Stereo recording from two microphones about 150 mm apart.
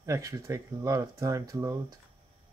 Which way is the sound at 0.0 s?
20° right (ahead or behind).